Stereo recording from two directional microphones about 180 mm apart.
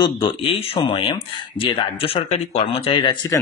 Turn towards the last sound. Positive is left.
turn(degrees=25)  # may be behind; listen again after turning